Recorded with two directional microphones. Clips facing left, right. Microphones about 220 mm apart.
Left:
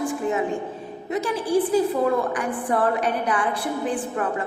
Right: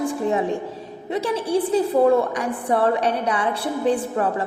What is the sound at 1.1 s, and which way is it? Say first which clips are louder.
Speech: right 2 dB; 30° right (ahead or behind).